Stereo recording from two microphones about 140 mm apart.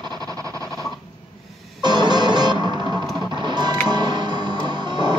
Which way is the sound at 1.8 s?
30° right (ahead or behind).